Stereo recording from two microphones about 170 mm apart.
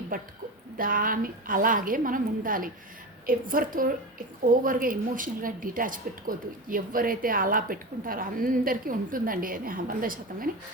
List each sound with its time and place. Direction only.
0.1 s a woman's voice: 50° right (ahead or behind)